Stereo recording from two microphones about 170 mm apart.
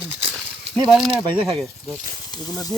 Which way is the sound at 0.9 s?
Centre (ahead or behind).